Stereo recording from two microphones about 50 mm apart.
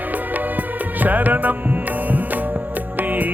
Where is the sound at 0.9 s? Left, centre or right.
Right.